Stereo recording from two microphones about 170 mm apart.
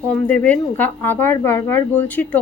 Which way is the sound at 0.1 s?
10° left (ahead or behind).